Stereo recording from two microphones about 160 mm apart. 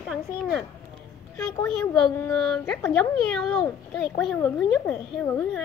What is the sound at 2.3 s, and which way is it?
Speech, 5° left (ahead or behind).